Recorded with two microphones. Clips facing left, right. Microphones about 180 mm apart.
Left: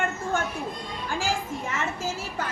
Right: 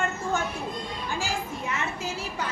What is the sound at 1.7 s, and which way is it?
Speech, 45° left (ahead or behind).